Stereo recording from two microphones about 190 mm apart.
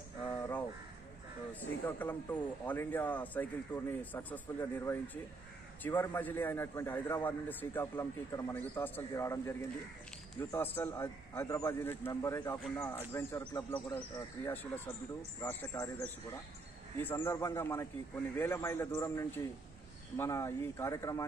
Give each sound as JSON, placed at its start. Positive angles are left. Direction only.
{"t": 0.4, "sound": "crow", "side_deg": 10}
{"t": 1.5, "sound": "a man's voice", "side_deg": 10}